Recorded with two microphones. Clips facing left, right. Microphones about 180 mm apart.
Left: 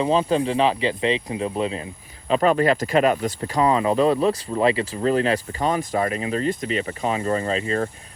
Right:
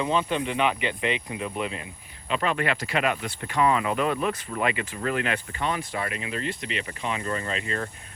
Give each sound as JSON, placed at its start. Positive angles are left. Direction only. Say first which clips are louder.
{"t": 0.0, "sound": "speech", "louder": "left 6 dB", "side_deg": 35}